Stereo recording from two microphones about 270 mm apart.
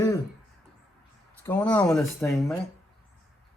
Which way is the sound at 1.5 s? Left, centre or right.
Centre.